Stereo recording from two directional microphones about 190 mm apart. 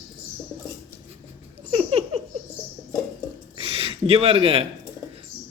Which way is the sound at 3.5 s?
30° right (ahead or behind).